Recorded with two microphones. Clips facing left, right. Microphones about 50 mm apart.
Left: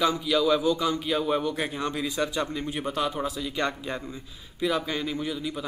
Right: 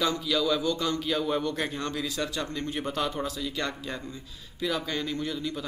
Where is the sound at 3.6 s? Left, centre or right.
Left.